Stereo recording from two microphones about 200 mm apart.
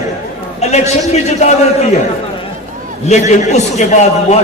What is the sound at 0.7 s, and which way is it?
Speech, 35° left (ahead or behind).